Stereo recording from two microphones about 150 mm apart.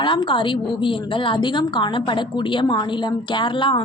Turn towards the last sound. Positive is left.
turn(degrees=35)  # may be behind; listen again after turning